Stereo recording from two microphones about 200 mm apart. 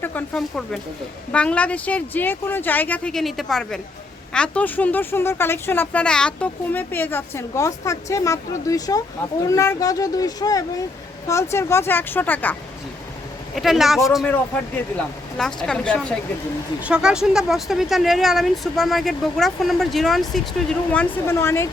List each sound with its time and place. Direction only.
0.0 s speech: 10° left (ahead or behind)
13.6 s speech: centre (ahead or behind)